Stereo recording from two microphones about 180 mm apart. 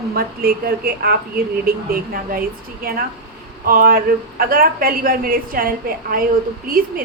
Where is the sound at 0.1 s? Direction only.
55° right (ahead or behind).